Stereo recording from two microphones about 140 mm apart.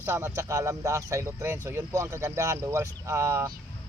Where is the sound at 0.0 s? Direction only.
20° right (ahead or behind).